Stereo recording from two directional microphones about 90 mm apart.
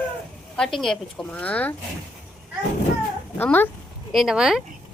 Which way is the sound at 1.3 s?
15° left (ahead or behind).